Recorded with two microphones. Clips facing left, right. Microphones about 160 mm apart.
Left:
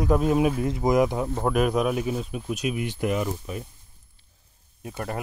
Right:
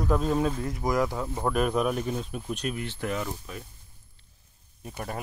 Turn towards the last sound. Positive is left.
turn(degrees=0)  # may be behind; listen again after turning